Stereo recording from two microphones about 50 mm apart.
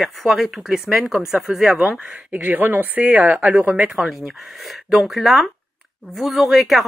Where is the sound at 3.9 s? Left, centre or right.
Centre.